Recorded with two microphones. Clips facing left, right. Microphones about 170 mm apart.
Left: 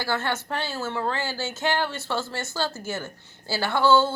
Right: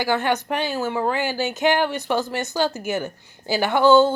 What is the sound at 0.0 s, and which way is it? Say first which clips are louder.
Speech: right 6 dB; 15° right (ahead or behind).